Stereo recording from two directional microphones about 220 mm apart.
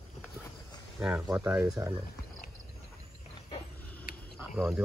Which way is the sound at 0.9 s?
5° right (ahead or behind).